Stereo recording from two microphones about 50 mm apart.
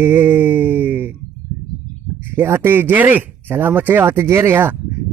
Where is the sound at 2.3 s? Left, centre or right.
Right.